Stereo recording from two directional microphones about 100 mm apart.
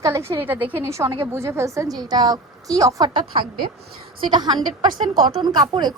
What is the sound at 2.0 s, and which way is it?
A woman's voice, 40° right (ahead or behind).